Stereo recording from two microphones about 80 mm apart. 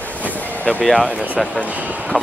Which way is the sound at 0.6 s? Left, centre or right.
Centre.